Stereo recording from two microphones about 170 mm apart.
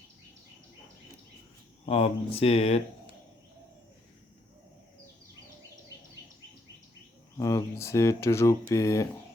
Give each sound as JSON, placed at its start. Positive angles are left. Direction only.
{"t": 1.9, "sound": "speech", "side_deg": 35}
{"t": 7.3, "sound": "speech", "side_deg": 20}